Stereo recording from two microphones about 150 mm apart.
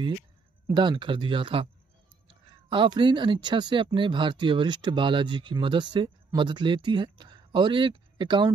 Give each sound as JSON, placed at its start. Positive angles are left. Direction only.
{"t": 0.7, "sound": "speech", "side_deg": -30}
{"t": 2.7, "sound": "speech", "side_deg": -35}